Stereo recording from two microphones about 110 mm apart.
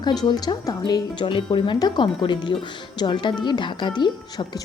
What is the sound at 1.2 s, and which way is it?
A woman's voice, 50° left (ahead or behind).